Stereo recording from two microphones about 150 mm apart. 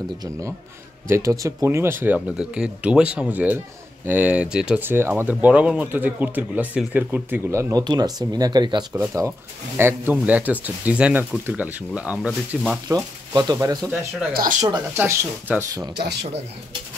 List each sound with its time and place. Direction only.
1.0 s speech: 20° right (ahead or behind)
8.9 s speech: 15° right (ahead or behind)
12.8 s speech: 25° right (ahead or behind)
14.3 s speech: 70° right (ahead or behind)
15.0 s speech: 15° right (ahead or behind)
16.0 s speech: 90° right